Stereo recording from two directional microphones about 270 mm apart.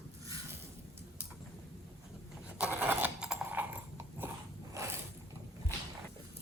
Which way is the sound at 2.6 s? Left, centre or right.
Centre.